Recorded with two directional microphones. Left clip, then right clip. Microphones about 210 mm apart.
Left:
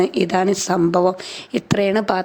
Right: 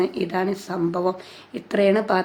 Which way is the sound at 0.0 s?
35° left (ahead or behind).